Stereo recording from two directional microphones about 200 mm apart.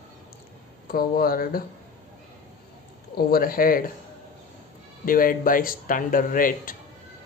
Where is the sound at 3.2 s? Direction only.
50° left (ahead or behind).